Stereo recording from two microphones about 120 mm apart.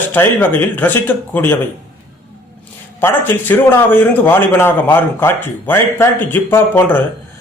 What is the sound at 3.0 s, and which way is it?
A man's voice, 20° left (ahead or behind).